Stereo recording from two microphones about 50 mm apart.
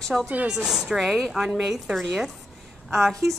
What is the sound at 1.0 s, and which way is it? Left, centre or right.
Speech, centre.